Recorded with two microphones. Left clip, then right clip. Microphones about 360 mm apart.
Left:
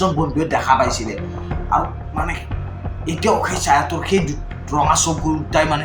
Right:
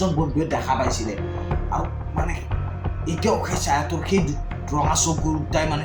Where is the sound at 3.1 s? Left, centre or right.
Right.